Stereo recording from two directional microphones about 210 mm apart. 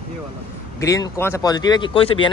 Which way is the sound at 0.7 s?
15° left (ahead or behind).